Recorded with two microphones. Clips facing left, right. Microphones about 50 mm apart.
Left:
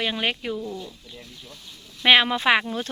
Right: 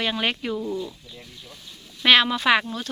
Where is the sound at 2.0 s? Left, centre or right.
Left.